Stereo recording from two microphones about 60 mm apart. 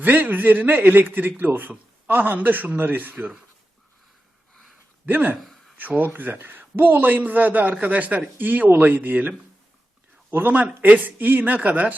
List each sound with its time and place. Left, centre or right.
0.0 s speech: right
5.0 s a man's voice: right
5.4 s a sound: centre
5.7 s a man's voice: right
10.3 s a man's voice: right